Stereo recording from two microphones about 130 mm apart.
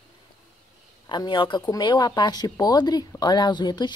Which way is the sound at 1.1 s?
35° left (ahead or behind).